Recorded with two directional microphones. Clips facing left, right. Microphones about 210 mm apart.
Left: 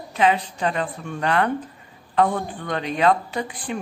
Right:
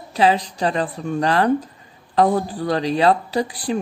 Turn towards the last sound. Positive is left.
turn(degrees=-35)  # may be behind; listen again after turning